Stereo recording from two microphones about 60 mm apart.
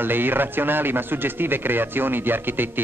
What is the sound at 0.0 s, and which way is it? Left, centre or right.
Speech, right.